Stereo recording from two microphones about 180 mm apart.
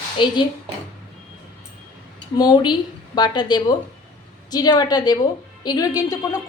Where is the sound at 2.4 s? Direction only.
25° left (ahead or behind).